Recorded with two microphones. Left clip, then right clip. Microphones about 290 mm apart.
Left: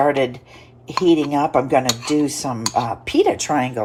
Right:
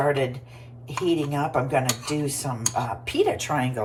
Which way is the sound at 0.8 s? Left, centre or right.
Centre.